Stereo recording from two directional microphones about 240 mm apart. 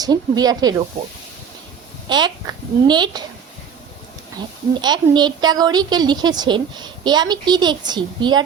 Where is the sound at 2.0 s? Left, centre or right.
Centre.